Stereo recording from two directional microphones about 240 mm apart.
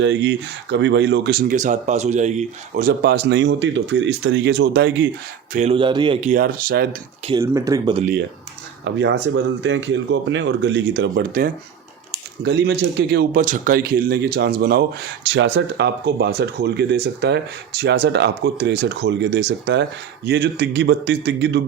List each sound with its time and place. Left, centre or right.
0.0 s speech: right
5.5 s speech: right
7.3 s speech: centre
8.8 s speech: right